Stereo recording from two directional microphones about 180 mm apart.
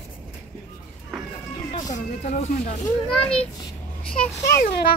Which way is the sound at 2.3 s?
40° left (ahead or behind).